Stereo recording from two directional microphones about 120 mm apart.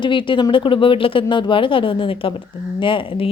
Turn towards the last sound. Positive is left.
turn(degrees=50)  # may be behind; listen again after turning